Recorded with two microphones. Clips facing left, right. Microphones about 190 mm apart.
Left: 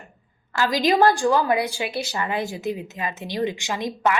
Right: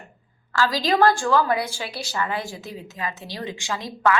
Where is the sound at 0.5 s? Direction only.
20° left (ahead or behind).